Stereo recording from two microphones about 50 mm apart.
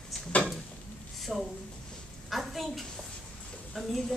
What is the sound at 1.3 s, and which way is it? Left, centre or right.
Speech, centre.